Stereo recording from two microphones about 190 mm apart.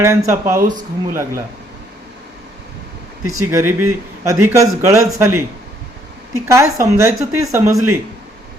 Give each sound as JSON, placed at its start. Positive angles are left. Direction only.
{"t": 0.0, "sound": "speech", "side_deg": -15}
{"t": 3.2, "sound": "speech", "side_deg": -15}